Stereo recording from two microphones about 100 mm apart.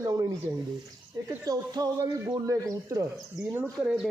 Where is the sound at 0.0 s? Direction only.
35° right (ahead or behind).